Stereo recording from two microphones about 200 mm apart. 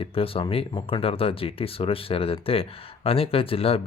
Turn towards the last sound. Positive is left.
turn(degrees=30)  # may be behind; listen again after turning